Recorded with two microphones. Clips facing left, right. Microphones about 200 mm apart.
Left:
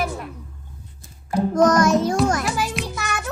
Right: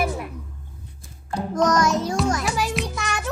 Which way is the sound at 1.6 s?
55° left (ahead or behind).